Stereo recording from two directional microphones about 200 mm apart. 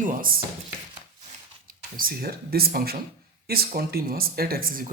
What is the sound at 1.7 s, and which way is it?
Speech, 45° right (ahead or behind).